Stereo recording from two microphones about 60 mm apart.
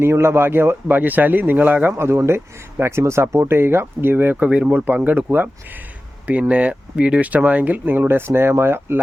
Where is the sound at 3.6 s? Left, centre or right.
Right.